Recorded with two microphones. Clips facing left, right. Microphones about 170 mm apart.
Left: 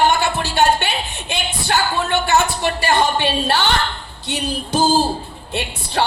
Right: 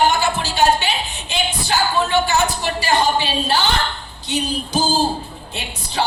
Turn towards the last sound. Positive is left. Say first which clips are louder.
# left 2 dB
turn(degrees=65)  # may be behind; listen again after turning